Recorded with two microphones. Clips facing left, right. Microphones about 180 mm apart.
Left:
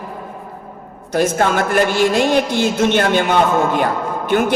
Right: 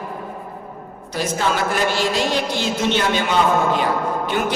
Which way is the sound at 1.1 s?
55° left (ahead or behind).